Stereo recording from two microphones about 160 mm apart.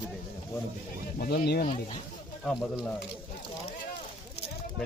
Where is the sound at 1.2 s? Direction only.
75° left (ahead or behind).